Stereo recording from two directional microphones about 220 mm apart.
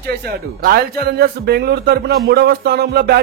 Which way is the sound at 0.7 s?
45° right (ahead or behind).